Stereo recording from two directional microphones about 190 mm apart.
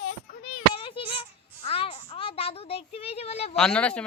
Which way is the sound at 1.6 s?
30° left (ahead or behind).